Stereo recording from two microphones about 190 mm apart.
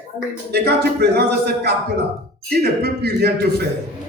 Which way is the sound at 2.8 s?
60° right (ahead or behind).